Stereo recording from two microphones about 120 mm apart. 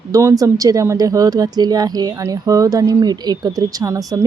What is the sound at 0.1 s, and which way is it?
Speech, 25° right (ahead or behind).